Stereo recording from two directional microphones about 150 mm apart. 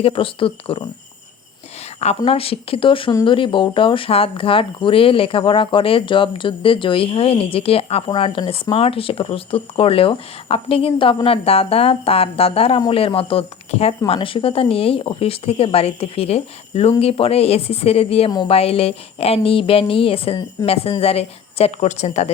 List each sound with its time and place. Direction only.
0.0 s speech: 35° left (ahead or behind)
2.0 s speech: 40° left (ahead or behind)